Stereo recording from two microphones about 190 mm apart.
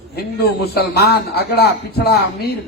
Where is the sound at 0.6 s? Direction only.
55° left (ahead or behind).